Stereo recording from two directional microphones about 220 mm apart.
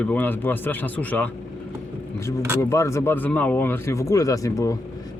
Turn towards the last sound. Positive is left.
turn(degrees=15)  # may be behind; listen again after turning